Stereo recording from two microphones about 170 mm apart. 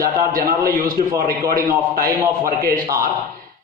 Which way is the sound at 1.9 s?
60° right (ahead or behind).